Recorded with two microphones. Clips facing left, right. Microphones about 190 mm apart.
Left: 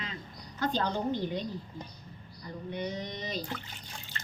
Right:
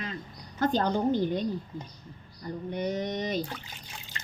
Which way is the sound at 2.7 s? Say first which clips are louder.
Right 6 dB; 50° right (ahead or behind).